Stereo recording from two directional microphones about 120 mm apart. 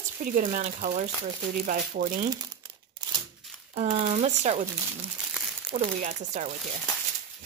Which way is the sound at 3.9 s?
60° right (ahead or behind).